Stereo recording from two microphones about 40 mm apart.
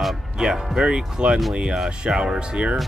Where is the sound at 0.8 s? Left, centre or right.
Right.